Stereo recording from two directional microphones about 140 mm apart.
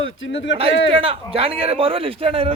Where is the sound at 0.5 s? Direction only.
45° right (ahead or behind).